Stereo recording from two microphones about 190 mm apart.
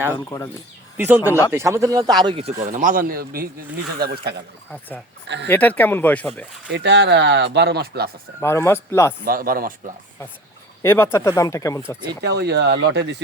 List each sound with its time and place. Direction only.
0.3 s speech: 15° left (ahead or behind)
0.9 s speech: 10° right (ahead or behind)
1.3 s speech: 15° left (ahead or behind)
1.5 s speech: 15° right (ahead or behind); by 4.4 s 60° right (ahead or behind)
5.5 s speech: 10° left (ahead or behind)
6.7 s speech: 65° right (ahead or behind)
8.4 s speech: 15° left (ahead or behind)
9.2 s speech: 50° right (ahead or behind)
10.8 s speech: 15° left (ahead or behind)
12.2 s speech: 60° right (ahead or behind)